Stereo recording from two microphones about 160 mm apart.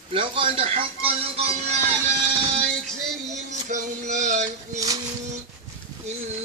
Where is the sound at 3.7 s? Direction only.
50° right (ahead or behind).